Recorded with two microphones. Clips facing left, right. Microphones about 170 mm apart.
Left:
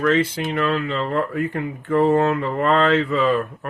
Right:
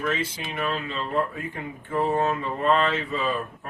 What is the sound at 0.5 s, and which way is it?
Speech, 85° left.